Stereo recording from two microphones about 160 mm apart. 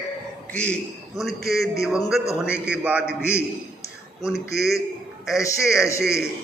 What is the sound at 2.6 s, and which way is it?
Speech, 10° right (ahead or behind).